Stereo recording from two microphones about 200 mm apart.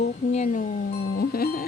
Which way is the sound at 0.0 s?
35° left (ahead or behind).